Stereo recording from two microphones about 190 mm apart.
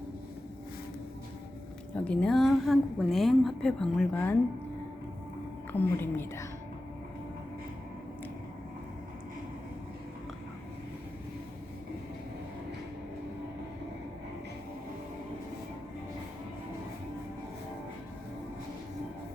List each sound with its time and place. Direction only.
2.0 s a woman's voice: 5° left (ahead or behind)
5.7 s a woman's voice: 10° left (ahead or behind)